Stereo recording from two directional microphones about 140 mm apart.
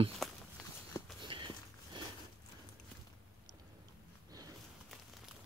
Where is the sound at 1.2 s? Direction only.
35° right (ahead or behind).